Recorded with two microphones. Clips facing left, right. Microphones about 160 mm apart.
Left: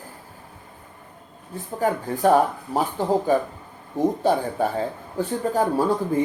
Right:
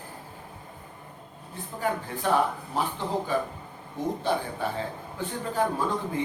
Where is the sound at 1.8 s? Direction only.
45° left (ahead or behind).